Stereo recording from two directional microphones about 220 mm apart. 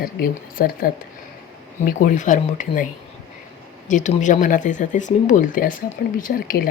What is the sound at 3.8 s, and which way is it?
Speech, 35° left (ahead or behind).